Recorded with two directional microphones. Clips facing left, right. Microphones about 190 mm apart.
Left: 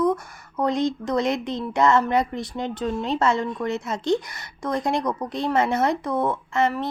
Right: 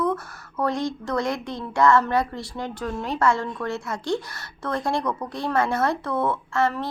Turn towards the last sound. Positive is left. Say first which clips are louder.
# left 1 dB
turn(degrees=20)  # may be behind; listen again after turning